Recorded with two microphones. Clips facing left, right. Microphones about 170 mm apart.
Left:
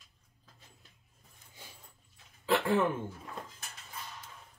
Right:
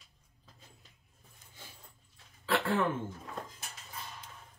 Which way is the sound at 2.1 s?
15° left (ahead or behind).